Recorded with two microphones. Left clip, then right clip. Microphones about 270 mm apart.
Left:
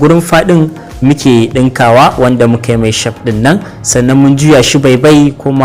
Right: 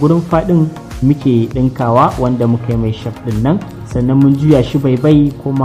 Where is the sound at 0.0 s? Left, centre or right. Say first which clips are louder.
Left 6 dB; left.